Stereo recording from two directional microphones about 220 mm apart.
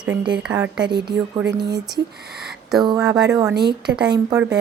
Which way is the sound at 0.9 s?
45° right (ahead or behind).